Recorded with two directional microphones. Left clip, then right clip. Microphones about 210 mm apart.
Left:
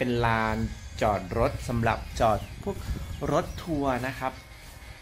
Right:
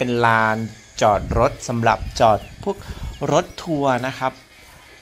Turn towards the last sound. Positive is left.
turn(degrees=-15)  # may be behind; listen again after turning